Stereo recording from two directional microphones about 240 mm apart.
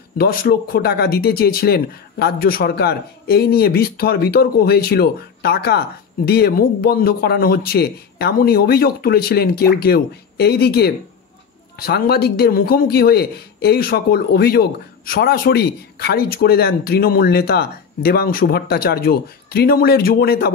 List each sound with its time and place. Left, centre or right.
0.2 s speech: left